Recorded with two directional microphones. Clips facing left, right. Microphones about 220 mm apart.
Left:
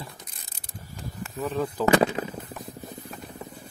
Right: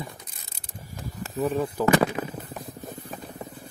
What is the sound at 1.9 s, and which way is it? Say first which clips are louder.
Speech: left 1 dB; 25° left (ahead or behind).